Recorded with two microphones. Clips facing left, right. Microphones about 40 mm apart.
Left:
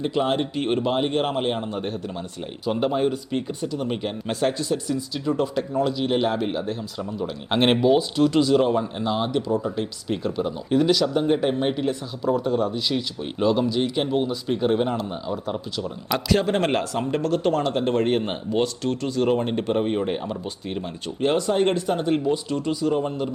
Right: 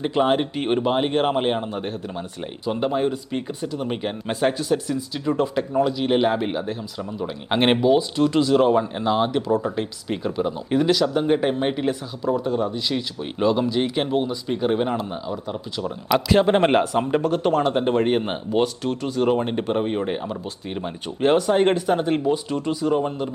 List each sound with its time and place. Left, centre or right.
0.0 s speech: centre
12.2 s speech: centre
13.7 s speech: right
14.1 s speech: centre
16.1 s speech: centre
20.8 s speech: right
22.3 s speech: centre